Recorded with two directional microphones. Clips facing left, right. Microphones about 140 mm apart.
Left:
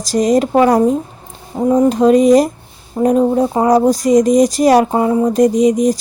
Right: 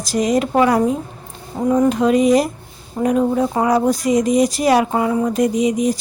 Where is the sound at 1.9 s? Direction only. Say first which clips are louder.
Left 7 dB; 40° left (ahead or behind).